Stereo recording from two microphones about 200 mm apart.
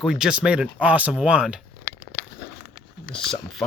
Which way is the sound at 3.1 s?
Centre (ahead or behind).